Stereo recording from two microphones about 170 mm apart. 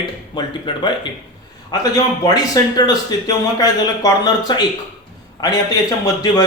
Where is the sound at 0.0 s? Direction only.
25° left (ahead or behind).